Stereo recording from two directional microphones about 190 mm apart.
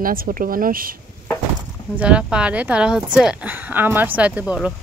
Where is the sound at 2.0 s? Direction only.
5° right (ahead or behind).